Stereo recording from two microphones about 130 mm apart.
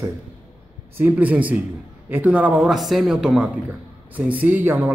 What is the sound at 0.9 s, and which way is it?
A man's voice, 10° right (ahead or behind).